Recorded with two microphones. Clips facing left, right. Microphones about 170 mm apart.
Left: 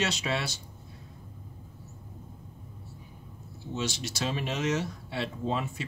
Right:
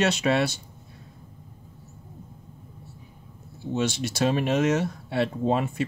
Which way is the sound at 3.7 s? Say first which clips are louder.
Right 7 dB; 55° right (ahead or behind).